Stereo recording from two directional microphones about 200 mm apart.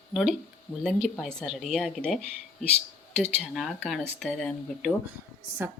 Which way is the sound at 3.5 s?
Centre (ahead or behind).